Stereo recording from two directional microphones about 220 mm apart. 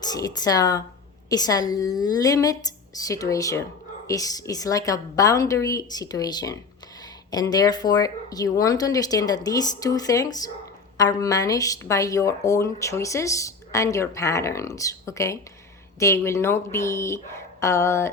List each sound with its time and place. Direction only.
0.0 s a woman's voice: 15° left (ahead or behind)